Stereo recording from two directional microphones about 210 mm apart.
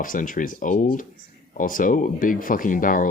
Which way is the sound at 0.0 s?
40° left (ahead or behind).